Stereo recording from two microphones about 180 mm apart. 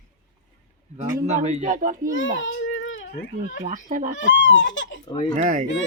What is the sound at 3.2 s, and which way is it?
Speech, 70° left (ahead or behind).